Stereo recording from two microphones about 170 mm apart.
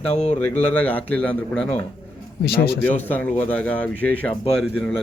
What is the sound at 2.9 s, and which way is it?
Speech, 10° left (ahead or behind).